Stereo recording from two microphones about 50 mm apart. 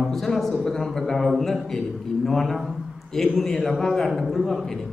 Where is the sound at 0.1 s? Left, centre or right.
Centre.